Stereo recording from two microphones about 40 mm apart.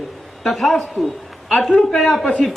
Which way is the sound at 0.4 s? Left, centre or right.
Centre.